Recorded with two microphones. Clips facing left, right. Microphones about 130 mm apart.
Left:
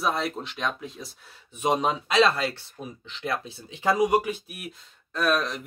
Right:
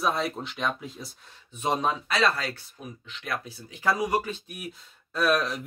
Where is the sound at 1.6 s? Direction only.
15° left (ahead or behind).